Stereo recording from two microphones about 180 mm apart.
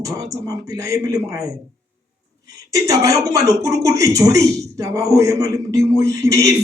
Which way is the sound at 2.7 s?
20° right (ahead or behind).